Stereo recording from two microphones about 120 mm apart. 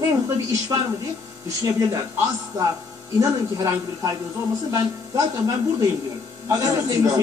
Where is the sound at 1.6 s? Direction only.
30° right (ahead or behind).